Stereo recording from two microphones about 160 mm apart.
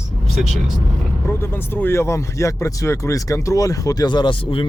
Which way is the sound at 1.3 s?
15° left (ahead or behind).